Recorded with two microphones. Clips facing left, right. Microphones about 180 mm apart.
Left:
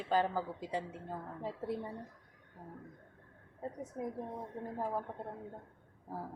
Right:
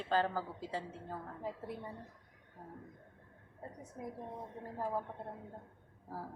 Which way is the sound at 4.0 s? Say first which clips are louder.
Left 5 dB; 55° left (ahead or behind).